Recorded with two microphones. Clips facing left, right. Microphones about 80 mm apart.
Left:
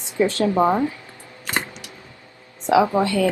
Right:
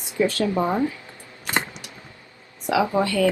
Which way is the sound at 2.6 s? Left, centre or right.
Left.